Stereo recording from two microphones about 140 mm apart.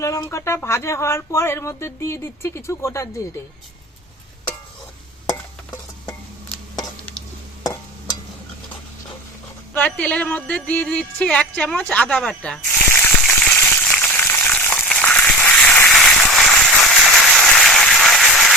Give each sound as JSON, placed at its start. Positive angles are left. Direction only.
{"t": 0.0, "sound": "speech", "side_deg": 20}
{"t": 9.7, "sound": "speech", "side_deg": 10}
{"t": 13.5, "sound": "frying", "side_deg": 5}
{"t": 14.8, "sound": "a sound", "side_deg": 10}